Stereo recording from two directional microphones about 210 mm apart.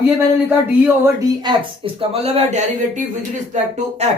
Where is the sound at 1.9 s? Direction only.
30° right (ahead or behind).